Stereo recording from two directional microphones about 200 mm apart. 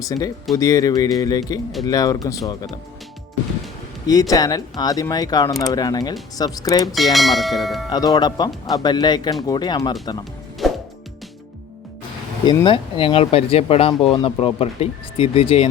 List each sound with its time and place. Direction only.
0.0 s speech: 15° left (ahead or behind)
4.0 s speech: 20° left (ahead or behind)
6.8 s speech: centre (ahead or behind)
7.9 s speech: 20° left (ahead or behind)
10.6 s music: centre (ahead or behind)
12.6 s speech: 25° left (ahead or behind)